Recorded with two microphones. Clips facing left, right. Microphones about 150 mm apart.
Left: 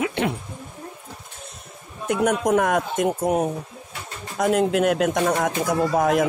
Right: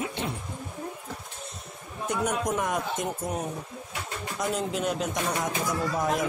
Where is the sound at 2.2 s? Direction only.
65° left (ahead or behind).